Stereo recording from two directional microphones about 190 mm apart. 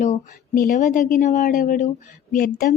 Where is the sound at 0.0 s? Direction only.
45° left (ahead or behind).